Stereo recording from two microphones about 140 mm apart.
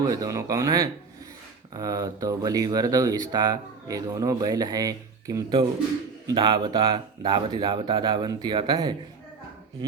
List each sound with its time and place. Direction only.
0.0 s speech: 25° right (ahead or behind)